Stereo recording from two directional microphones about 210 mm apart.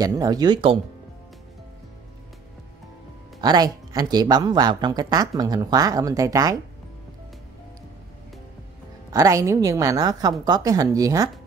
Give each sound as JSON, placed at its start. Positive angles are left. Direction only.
{"t": 0.0, "sound": "speech", "side_deg": -15}
{"t": 3.3, "sound": "speech", "side_deg": -20}
{"t": 9.1, "sound": "a woman's voice", "side_deg": -15}